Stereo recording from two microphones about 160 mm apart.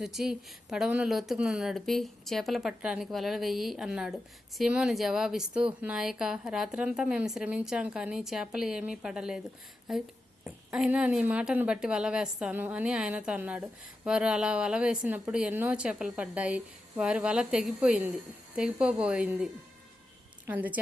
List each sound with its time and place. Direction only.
0.0 s a woman's voice: centre (ahead or behind)
20.5 s a woman's voice: 10° right (ahead or behind)